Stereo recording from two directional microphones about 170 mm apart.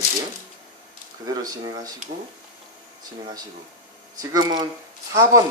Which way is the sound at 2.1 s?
40° right (ahead or behind).